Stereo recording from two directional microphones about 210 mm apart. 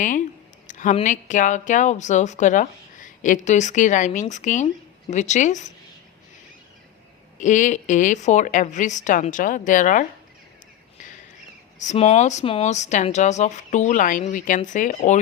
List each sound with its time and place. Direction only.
0.7 s speech: 35° left (ahead or behind)
7.3 s speech: 35° left (ahead or behind)
11.8 s speech: 35° left (ahead or behind)